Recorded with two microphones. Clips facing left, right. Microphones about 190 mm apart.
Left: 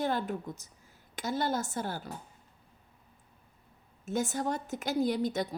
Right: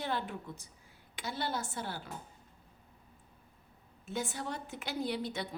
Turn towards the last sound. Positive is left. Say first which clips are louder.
# left 6 dB
turn(degrees=45)  # may be behind; listen again after turning